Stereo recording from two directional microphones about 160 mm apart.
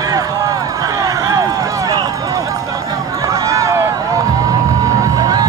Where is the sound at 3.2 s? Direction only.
20° right (ahead or behind).